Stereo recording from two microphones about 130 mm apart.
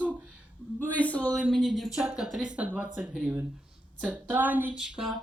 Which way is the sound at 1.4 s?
5° right (ahead or behind).